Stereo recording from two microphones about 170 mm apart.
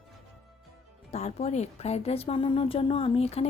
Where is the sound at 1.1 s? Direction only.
40° left (ahead or behind).